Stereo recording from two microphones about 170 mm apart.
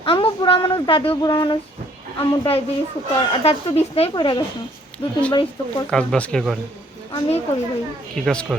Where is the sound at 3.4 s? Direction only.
35° left (ahead or behind).